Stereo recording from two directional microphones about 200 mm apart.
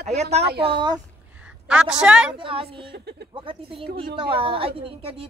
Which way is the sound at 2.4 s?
25° right (ahead or behind).